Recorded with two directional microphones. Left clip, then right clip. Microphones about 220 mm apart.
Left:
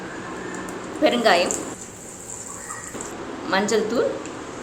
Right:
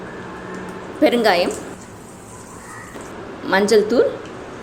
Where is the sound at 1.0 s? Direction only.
25° right (ahead or behind).